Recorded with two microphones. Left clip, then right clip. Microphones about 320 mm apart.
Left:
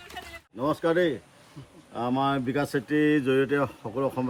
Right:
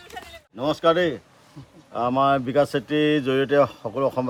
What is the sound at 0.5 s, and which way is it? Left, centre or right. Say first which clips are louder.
Speech: right 5 dB; right.